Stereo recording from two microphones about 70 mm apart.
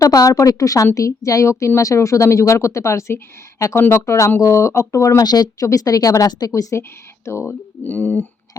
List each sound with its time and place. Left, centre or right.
0.0 s speech: left
3.8 s speech: left
4.0 s speech: left
5.2 s speech: left
6.5 s speech: left
7.9 s speech: left